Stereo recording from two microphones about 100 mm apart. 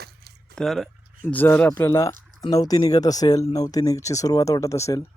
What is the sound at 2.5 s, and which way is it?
Speech, 40° left (ahead or behind).